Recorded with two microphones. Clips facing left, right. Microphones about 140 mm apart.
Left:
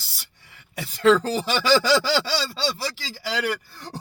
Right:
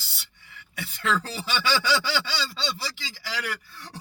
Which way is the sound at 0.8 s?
40° left (ahead or behind).